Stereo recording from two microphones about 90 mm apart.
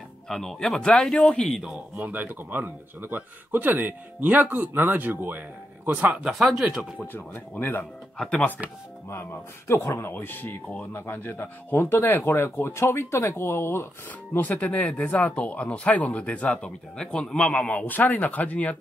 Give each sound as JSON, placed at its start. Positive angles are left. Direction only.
{"t": 0.3, "sound": "speech", "side_deg": 5}
{"t": 1.5, "sound": "speech", "side_deg": -5}
{"t": 2.0, "sound": "a man's voice", "side_deg": -20}
{"t": 7.0, "sound": "speech", "side_deg": 20}
{"t": 8.2, "sound": "speech", "side_deg": 10}
{"t": 9.7, "sound": "speech", "side_deg": 30}